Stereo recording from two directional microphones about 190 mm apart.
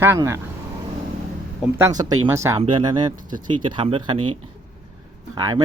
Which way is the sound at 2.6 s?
25° right (ahead or behind).